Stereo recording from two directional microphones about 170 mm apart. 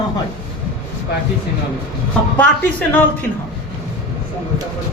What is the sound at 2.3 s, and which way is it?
Speech, 10° left (ahead or behind).